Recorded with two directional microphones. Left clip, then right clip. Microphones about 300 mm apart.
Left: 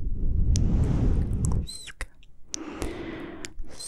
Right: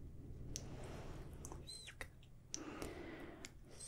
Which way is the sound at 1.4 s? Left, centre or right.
Left.